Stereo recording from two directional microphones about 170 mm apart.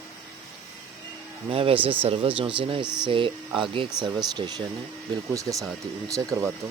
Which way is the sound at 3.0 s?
30° right (ahead or behind).